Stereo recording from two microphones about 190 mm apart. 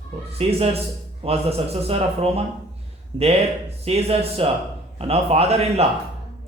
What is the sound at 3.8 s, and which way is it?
Speech, 35° right (ahead or behind).